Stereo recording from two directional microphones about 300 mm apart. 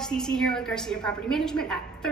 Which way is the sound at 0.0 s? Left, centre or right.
Centre.